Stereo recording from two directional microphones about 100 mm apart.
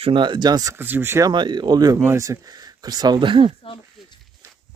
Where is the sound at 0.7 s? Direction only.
20° right (ahead or behind).